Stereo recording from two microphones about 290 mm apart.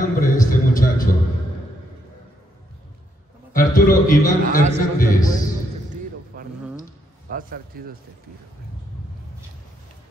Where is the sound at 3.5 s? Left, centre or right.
Left.